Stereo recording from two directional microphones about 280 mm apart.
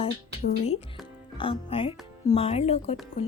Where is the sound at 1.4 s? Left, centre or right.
Centre.